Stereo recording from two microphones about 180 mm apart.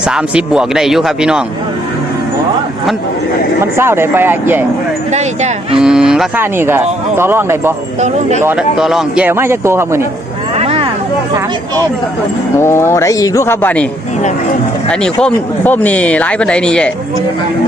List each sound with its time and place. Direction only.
0.0 s speech: 5° right (ahead or behind)
3.6 s speech: 15° right (ahead or behind)
5.7 s speech: 5° right (ahead or behind)
10.6 s a sound: 35° right (ahead or behind)
12.5 s speech: 15° left (ahead or behind)
14.8 s speech: 5° left (ahead or behind)